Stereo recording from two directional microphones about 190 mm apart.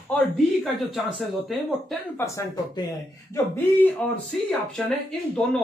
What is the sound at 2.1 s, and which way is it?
Speech, 15° left (ahead or behind).